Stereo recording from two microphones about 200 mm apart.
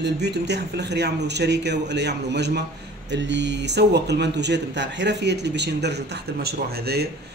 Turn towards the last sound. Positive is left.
turn(degrees=-50)  # may be behind; listen again after turning